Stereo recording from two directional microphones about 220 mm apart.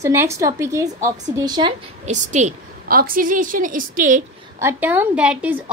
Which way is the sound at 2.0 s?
35° right (ahead or behind).